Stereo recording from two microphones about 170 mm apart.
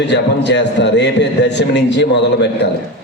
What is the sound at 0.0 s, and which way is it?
A man's voice, 90° left.